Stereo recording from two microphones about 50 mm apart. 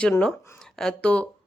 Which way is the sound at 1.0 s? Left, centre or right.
Left.